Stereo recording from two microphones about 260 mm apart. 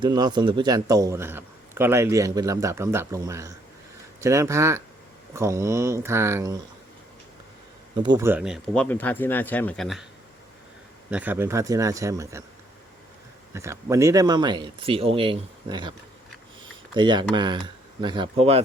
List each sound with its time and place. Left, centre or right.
0.0 s a man's voice: centre
7.9 s speech: centre
11.1 s a man's voice: centre
13.5 s a man's voice: centre